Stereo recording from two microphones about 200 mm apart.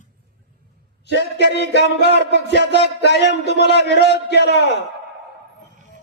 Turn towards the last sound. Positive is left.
turn(degrees=60)  # may be behind; listen again after turning